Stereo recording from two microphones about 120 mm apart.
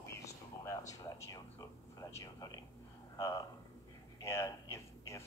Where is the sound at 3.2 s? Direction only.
25° left (ahead or behind).